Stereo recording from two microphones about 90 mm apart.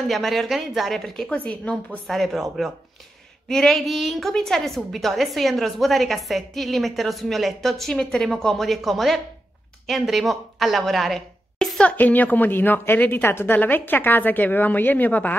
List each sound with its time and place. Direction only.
0.1 s a woman's voice: centre (ahead or behind)
12.0 s a woman's voice: 20° left (ahead or behind)